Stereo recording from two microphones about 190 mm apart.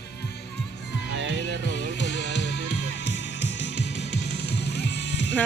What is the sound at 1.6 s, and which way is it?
Music, 65° left (ahead or behind).